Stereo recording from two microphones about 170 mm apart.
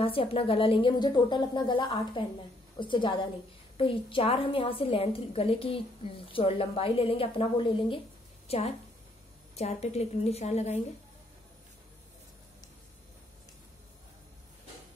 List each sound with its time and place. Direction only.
0.0 s a woman's voice: 30° left (ahead or behind)